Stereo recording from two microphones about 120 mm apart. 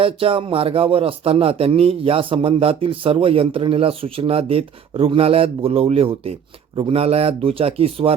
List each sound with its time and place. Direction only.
0.0 s speech: 50° right (ahead or behind)